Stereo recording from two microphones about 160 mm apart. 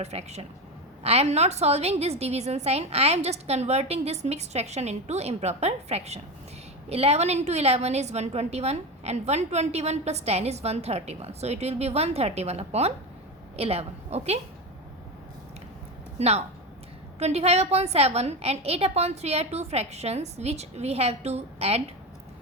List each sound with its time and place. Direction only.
0.0 s a woman's voice: 45° right (ahead or behind)
16.1 s a woman's voice: 40° right (ahead or behind)